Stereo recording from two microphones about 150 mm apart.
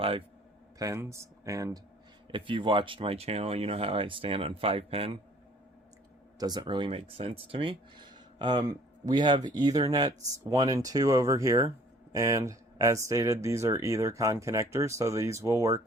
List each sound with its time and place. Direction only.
0.8 s speech: 20° right (ahead or behind)
2.3 s speech: 35° right (ahead or behind)
6.4 s speech: 30° right (ahead or behind)